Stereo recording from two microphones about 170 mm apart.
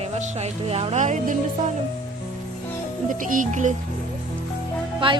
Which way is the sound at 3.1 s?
50° right (ahead or behind).